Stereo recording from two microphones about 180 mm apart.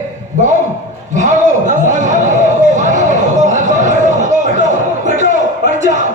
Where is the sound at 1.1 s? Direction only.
45° right (ahead or behind).